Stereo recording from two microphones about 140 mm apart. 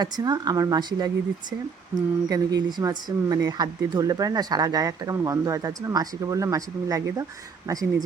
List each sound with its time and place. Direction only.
0.0 s speech: 30° right (ahead or behind)